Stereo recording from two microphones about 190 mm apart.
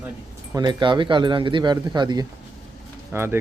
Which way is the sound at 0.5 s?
20° right (ahead or behind).